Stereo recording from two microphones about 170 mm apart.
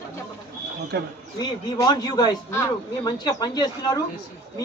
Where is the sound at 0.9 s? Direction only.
70° right (ahead or behind).